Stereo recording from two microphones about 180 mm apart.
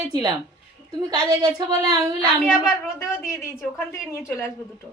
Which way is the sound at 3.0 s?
15° left (ahead or behind).